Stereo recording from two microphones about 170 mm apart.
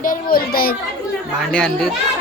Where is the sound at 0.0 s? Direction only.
55° left (ahead or behind).